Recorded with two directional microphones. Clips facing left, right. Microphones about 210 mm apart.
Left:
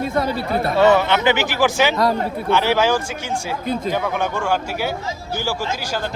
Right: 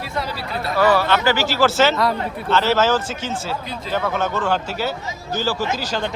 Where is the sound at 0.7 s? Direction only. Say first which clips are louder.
Left 2 dB; 25° left (ahead or behind).